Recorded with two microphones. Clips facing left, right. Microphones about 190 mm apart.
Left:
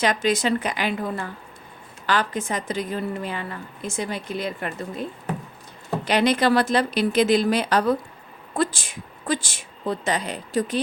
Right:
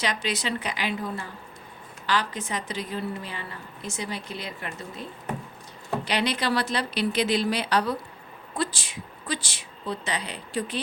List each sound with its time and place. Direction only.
0.0 s a woman's voice: 50° left (ahead or behind)
6.1 s a woman's voice: 50° left (ahead or behind)